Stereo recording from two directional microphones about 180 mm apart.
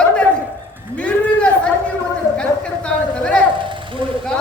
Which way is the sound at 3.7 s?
25° right (ahead or behind).